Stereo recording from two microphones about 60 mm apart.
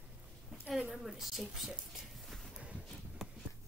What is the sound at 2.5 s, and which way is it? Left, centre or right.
Horse, right.